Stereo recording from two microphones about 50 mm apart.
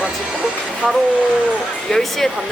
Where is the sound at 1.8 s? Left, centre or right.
Centre.